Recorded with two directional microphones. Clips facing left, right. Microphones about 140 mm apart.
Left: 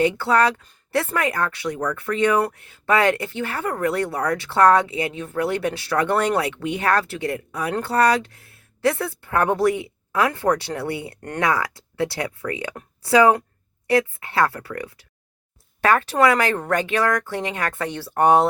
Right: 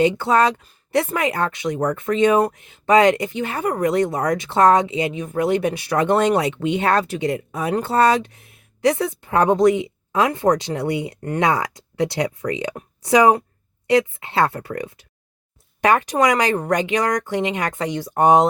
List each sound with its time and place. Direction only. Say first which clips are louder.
0.0 s speech: right 2 dB; 20° right (ahead or behind)